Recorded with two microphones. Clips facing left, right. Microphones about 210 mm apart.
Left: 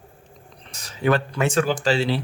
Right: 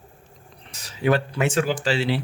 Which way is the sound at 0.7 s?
45° left (ahead or behind).